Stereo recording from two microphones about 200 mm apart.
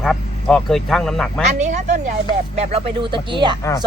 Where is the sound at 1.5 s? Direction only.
35° right (ahead or behind).